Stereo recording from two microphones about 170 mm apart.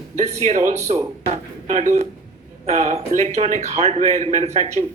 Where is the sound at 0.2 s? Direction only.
40° right (ahead or behind).